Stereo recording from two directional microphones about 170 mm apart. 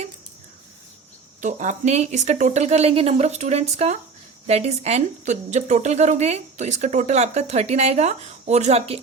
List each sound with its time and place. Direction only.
1.4 s a woman's voice: 45° right (ahead or behind)